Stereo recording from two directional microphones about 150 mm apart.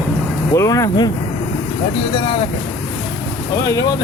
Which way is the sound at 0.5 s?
20° left (ahead or behind).